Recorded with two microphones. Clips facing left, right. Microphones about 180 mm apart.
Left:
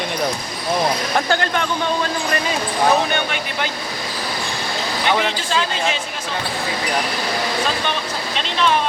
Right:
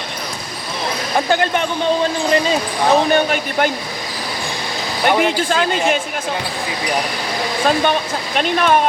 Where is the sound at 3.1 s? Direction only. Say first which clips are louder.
Right 7 dB; 45° right (ahead or behind).